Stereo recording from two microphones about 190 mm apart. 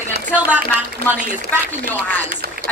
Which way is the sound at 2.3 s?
55° right (ahead or behind).